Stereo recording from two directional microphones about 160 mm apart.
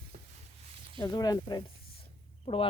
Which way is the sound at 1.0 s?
25° left (ahead or behind).